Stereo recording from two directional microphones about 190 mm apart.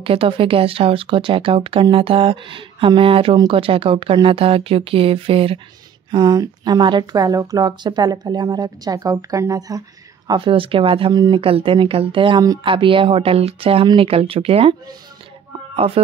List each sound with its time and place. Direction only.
0.0 s speech: 30° right (ahead or behind)
6.1 s speech: 20° right (ahead or behind)